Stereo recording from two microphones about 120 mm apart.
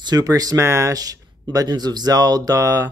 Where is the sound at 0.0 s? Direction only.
35° right (ahead or behind).